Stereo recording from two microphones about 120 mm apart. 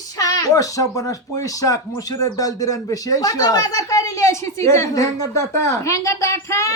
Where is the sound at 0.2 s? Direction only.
30° left (ahead or behind).